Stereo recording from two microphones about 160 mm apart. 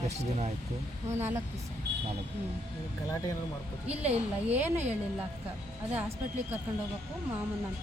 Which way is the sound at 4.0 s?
40° right (ahead or behind).